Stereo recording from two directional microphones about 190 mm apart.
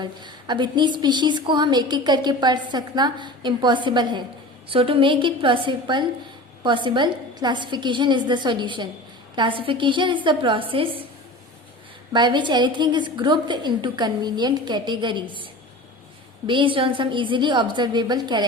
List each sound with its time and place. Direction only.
0.0 s a woman's voice: 25° right (ahead or behind)
12.1 s a woman's voice: 25° right (ahead or behind)
16.5 s a woman's voice: 25° right (ahead or behind)